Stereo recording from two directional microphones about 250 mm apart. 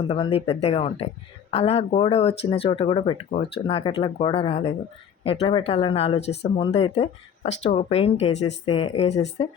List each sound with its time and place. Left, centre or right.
0.2 s speech: left